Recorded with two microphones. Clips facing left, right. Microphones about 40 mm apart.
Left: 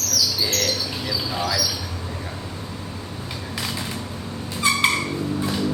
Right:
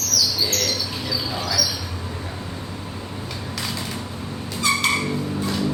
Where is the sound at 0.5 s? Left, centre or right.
Centre.